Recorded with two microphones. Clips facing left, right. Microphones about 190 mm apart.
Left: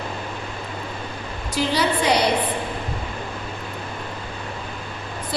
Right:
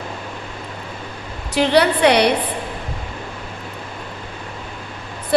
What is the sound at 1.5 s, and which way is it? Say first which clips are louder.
Speech: right 6 dB; 65° right (ahead or behind).